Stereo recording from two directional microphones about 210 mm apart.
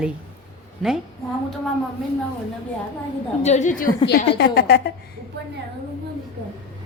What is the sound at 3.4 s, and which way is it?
Speech, 35° left (ahead or behind).